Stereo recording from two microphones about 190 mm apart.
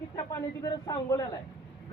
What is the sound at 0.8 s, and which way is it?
Speech, 20° left (ahead or behind).